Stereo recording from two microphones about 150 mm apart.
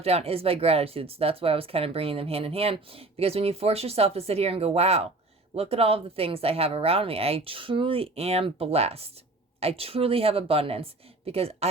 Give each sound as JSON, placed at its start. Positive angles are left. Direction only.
{"t": 0.0, "sound": "speech", "side_deg": -45}